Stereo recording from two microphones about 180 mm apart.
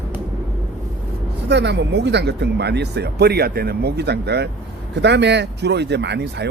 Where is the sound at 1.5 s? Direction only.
70° right (ahead or behind).